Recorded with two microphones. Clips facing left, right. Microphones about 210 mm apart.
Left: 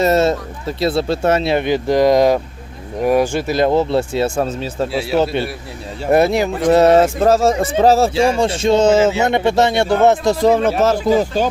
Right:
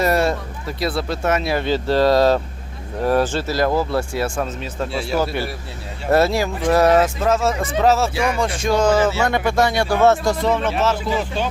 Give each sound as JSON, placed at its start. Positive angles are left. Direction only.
{"t": 0.0, "sound": "speech", "side_deg": 25}
{"t": 4.9, "sound": "speech", "side_deg": 5}
{"t": 5.2, "sound": "speech", "side_deg": 25}
{"t": 10.4, "sound": "speech", "side_deg": 40}